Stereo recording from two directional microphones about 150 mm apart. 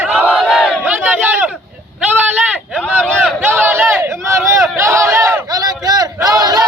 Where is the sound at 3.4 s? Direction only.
10° right (ahead or behind).